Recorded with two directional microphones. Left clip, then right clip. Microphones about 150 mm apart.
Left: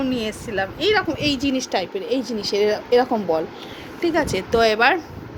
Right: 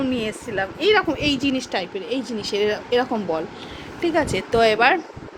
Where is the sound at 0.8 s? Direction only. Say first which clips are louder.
Right 2 dB; 20° right (ahead or behind).